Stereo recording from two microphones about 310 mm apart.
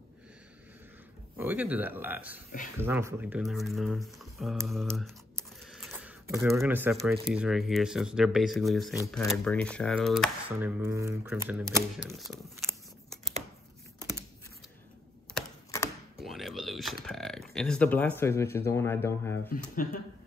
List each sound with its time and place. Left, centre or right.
1.4 s speech: centre
15.3 s typing: centre
19.7 s speech: left